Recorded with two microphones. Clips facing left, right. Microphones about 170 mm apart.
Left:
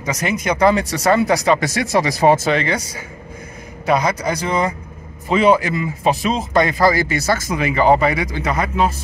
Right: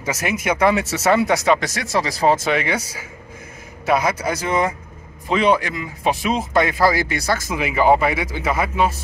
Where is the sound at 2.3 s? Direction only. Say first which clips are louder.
Left 2 dB; centre (ahead or behind).